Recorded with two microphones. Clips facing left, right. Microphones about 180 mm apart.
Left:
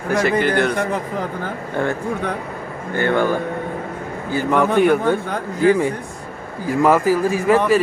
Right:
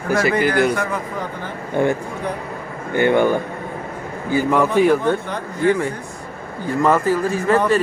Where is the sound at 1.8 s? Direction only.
15° right (ahead or behind).